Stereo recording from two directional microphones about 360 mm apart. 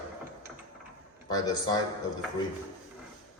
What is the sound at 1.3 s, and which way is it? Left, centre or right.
Speech, centre.